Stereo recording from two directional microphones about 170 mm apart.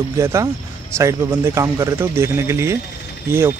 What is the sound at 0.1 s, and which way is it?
Speech, 20° right (ahead or behind).